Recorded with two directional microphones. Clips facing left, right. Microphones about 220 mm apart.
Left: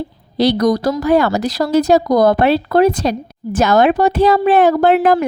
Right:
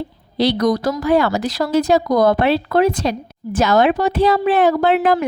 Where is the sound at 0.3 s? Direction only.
40° left (ahead or behind).